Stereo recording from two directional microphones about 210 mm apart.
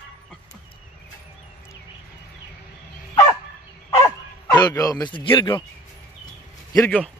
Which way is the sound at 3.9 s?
15° left (ahead or behind).